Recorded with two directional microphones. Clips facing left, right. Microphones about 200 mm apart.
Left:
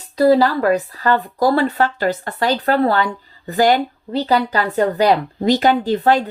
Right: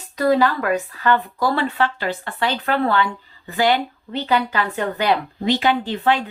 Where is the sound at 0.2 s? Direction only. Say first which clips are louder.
Left 4 dB; 35° left (ahead or behind).